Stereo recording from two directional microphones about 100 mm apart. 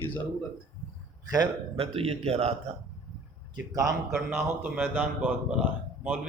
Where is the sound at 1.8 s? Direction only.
80° right.